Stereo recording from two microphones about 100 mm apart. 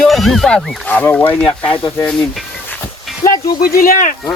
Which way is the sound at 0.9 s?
15° left (ahead or behind).